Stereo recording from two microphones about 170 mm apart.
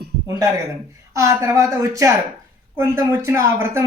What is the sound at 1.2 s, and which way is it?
Speech, 20° right (ahead or behind).